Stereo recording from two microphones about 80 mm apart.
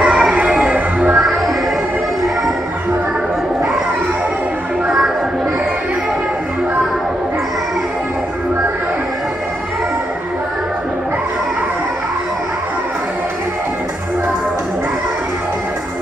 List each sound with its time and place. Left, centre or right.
0.0 s music: centre
1.2 s music: centre
4.8 s music: centre